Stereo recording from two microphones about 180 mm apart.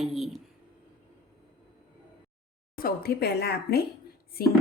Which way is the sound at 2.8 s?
60° left (ahead or behind).